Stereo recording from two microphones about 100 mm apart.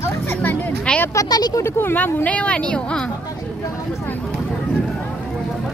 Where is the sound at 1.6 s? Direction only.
25° left (ahead or behind).